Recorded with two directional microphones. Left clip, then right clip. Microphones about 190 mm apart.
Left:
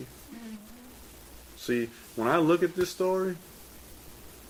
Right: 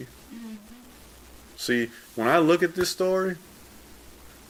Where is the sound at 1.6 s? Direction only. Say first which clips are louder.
Right 4 dB; 30° right (ahead or behind).